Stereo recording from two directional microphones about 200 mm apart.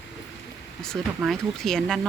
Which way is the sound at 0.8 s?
5° left (ahead or behind).